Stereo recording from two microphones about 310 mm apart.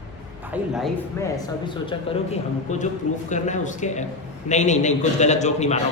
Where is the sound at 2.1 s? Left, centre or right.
Centre.